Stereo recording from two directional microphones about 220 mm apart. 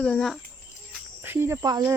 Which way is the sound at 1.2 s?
10° right (ahead or behind).